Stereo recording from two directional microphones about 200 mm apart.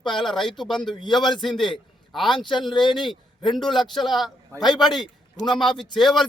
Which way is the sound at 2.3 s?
25° left (ahead or behind).